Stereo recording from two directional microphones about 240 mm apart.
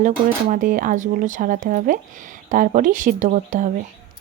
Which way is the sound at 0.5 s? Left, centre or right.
Right.